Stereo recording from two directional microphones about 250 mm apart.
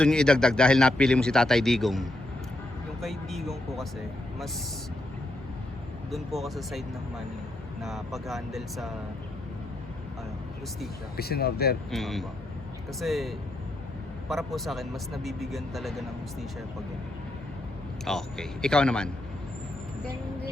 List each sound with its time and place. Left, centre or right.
0.0 s speech: centre
3.0 s a sound: centre
6.1 s speech: centre
11.2 s speech: left
11.9 s speech: centre
18.0 s speech: centre